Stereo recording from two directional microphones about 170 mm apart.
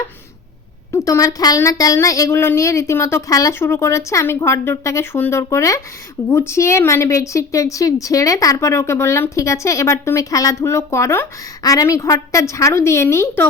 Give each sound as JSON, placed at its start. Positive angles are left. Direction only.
{"t": 0.9, "sound": "a woman's voice", "side_deg": 15}